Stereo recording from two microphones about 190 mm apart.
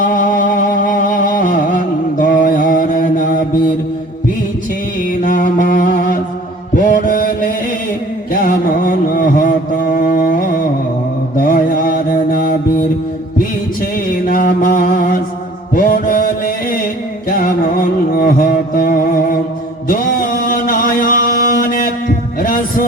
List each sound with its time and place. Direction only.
0.0 s music: 45° left (ahead or behind)
5.2 s mantra: 45° left (ahead or behind)
8.3 s music: 50° left (ahead or behind)
11.3 s mantra: 50° left (ahead or behind)
14.1 s mantra: 45° left (ahead or behind)
17.2 s music: 45° left (ahead or behind)
19.9 s mantra: 45° left (ahead or behind)
22.4 s heart murmur: 45° left (ahead or behind)